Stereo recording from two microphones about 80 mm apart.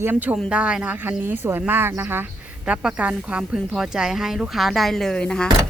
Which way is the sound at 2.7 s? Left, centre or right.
Centre.